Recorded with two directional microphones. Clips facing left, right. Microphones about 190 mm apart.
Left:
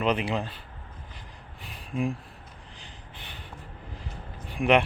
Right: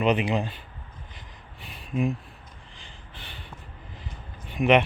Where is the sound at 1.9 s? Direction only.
5° right (ahead or behind).